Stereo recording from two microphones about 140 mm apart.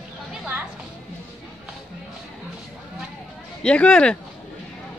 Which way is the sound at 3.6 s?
5° left (ahead or behind).